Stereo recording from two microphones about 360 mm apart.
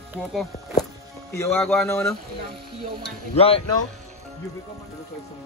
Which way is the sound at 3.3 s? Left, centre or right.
Centre.